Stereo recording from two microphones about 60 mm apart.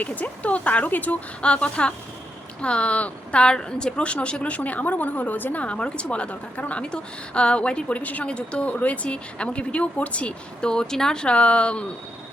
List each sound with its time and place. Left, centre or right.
0.0 s a woman's voice: left